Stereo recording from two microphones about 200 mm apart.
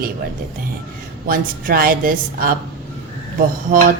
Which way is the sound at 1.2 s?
45° right (ahead or behind).